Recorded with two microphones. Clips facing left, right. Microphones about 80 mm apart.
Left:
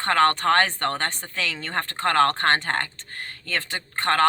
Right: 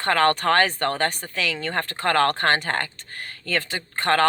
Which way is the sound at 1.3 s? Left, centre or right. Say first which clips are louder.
Right 2 dB; left.